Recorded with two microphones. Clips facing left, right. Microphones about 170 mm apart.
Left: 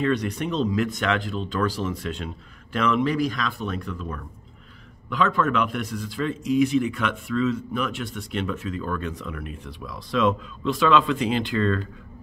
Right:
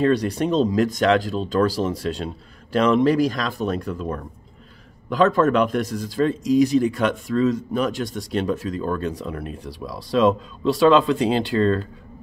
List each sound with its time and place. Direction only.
0.0 s speech: 40° right (ahead or behind)